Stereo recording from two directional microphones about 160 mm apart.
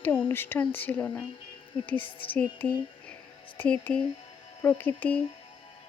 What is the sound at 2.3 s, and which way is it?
Speech, 10° left (ahead or behind).